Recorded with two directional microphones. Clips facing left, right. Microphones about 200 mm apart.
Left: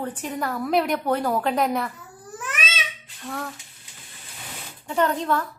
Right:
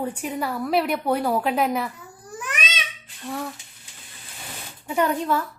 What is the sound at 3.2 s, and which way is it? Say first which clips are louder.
Speech: right 2 dB; 10° right (ahead or behind).